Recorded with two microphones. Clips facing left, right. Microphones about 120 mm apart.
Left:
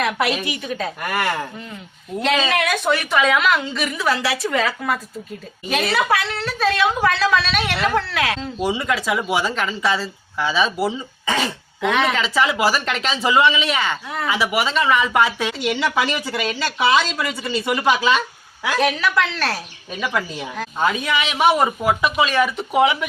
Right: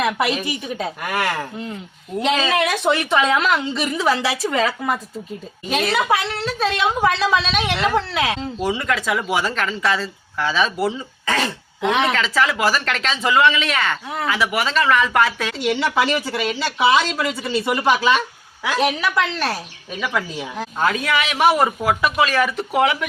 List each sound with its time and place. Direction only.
0.8 s a woman's voice: 15° right (ahead or behind)
1.1 s speech: centre (ahead or behind)
2.5 s a woman's voice: 25° right (ahead or behind)
8.6 s speech: 10° left (ahead or behind)
11.8 s a woman's voice: 20° right (ahead or behind)
12.1 s a woman's voice: 5° left (ahead or behind)
18.8 s a woman's voice: 15° right (ahead or behind)
20.0 s speech: centre (ahead or behind)